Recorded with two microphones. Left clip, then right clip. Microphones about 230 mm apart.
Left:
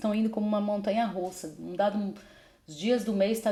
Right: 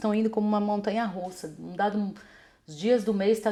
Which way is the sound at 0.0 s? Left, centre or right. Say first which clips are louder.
Right 3 dB; right.